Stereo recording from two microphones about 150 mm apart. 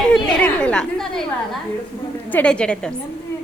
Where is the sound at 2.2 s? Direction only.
10° left (ahead or behind).